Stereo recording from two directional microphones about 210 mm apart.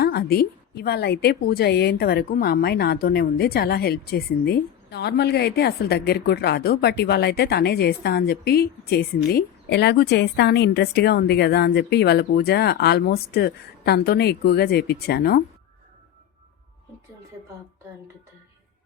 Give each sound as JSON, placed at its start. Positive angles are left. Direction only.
{"t": 0.0, "sound": "a woman's voice", "side_deg": 45}